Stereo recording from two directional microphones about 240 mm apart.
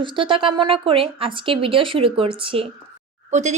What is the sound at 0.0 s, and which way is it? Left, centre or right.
Speech, centre.